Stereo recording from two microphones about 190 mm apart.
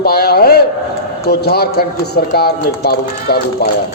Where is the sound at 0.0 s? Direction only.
55° left (ahead or behind).